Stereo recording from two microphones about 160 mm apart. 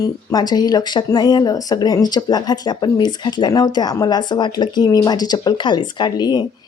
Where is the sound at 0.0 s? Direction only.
25° left (ahead or behind).